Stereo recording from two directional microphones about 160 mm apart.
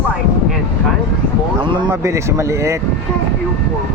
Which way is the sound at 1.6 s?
30° right (ahead or behind).